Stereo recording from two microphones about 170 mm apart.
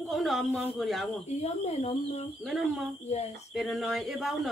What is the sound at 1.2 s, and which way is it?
Speech, 40° left (ahead or behind).